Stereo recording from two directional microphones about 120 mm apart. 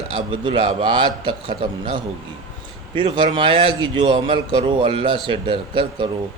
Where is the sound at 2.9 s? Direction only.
40° right (ahead or behind).